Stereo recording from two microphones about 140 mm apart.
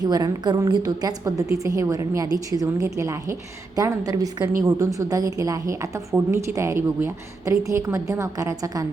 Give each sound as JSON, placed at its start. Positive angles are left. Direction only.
{"t": 0.0, "sound": "a woman's voice", "side_deg": -30}